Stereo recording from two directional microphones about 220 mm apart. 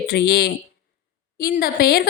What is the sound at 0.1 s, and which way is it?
Speech, 50° left (ahead or behind).